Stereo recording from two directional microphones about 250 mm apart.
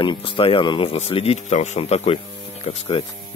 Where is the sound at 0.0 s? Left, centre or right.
Centre.